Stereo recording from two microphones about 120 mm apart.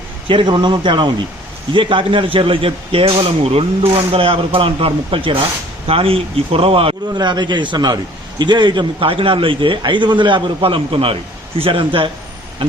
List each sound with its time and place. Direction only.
0.3 s a man's voice: 40° right (ahead or behind)
7.1 s a man's voice: 35° right (ahead or behind)